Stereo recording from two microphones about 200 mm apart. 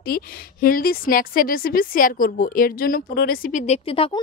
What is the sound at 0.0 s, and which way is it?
A woman's voice, 50° left (ahead or behind).